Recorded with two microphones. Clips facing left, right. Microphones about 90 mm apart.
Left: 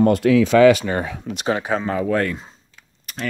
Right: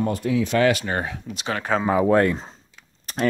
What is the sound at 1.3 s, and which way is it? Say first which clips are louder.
Speech: left 6 dB; 70° left (ahead or behind).